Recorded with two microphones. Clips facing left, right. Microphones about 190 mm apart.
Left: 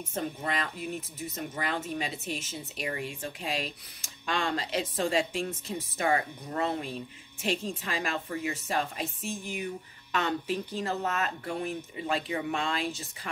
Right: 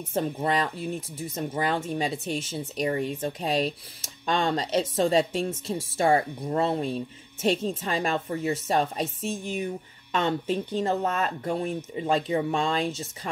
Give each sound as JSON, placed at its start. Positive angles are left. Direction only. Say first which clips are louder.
{"t": 0.1, "sound": "speech", "louder": "right 7 dB", "side_deg": -35}